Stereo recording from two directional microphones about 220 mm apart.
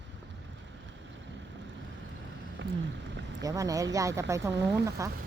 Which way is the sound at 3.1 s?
55° right (ahead or behind).